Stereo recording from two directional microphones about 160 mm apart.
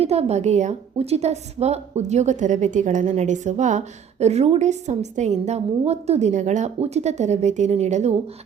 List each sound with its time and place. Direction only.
0.0 s a woman's voice: 40° right (ahead or behind)